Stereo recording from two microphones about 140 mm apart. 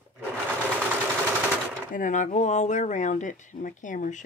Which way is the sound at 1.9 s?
65° left (ahead or behind).